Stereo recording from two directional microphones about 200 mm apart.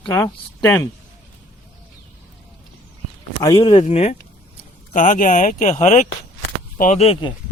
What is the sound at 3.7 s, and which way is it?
Speech, 35° left (ahead or behind).